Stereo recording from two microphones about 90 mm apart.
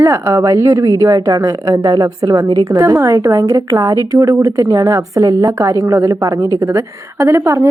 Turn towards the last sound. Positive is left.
turn(degrees=-35)  # may be behind; listen again after turning